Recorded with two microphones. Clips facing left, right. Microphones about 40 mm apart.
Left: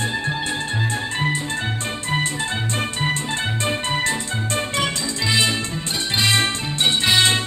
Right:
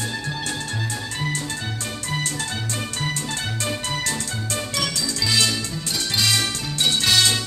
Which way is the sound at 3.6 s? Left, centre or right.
Left.